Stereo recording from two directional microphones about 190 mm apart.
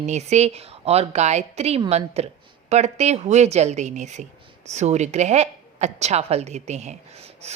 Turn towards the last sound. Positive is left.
turn(degrees=-35)  # may be behind; listen again after turning